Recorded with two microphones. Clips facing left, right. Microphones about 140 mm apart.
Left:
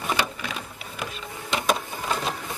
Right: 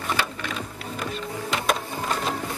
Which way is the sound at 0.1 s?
15° left (ahead or behind).